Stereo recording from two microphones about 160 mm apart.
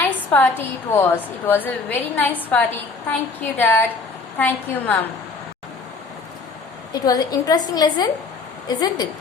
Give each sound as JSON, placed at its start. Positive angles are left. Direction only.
{"t": 0.0, "sound": "a sound", "side_deg": 10}
{"t": 0.9, "sound": "a woman's voice", "side_deg": 10}
{"t": 6.9, "sound": "a woman's voice", "side_deg": 25}